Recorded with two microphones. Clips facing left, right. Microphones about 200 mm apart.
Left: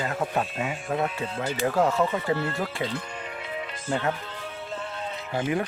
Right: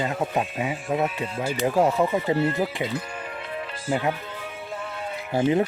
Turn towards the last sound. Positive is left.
turn(degrees=-25)  # may be behind; listen again after turning